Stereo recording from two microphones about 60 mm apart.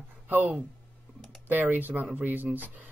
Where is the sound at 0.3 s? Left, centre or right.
Right.